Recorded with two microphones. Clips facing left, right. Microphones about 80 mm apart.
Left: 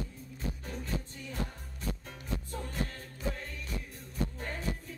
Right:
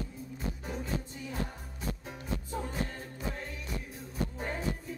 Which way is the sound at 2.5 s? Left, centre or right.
Centre.